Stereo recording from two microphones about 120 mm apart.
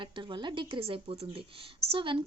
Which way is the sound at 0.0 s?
45° right (ahead or behind).